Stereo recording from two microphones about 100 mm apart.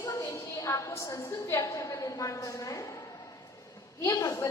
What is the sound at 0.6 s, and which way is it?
A woman's voice, 35° left (ahead or behind).